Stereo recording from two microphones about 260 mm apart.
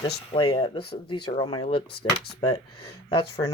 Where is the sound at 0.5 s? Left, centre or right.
Centre.